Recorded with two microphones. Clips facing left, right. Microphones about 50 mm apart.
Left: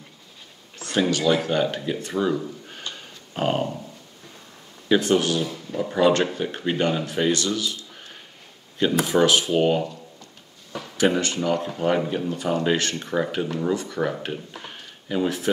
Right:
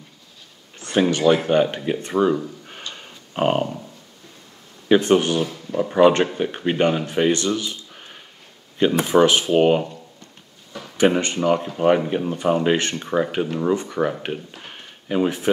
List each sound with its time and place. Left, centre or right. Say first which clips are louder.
0.7 s a sound: right 3 dB; right
1.1 s speech: right 6 dB; right
2.3 s a sound: right 2 dB; centre
4.8 s speech: right 4 dB; right
5.7 s speech: right 4 dB; centre
5.9 s speech: right 4 dB; right
11.0 s speech: right 3 dB; right
12.9 s speech: right 3 dB; centre
14.8 s a sound: right 4 dB; right